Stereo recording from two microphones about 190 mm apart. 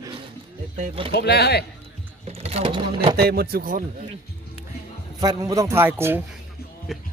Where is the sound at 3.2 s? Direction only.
55° right (ahead or behind).